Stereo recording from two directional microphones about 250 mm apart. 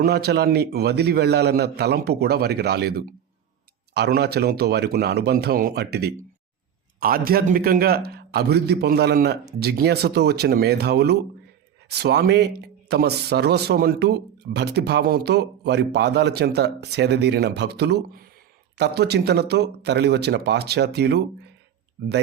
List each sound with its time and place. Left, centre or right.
0.0 s speech: right